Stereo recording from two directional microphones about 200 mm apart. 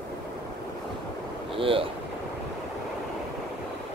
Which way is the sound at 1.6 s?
25° right (ahead or behind).